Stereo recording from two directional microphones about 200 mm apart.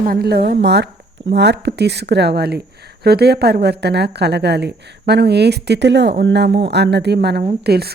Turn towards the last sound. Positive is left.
turn(degrees=-55)  # may be behind; listen again after turning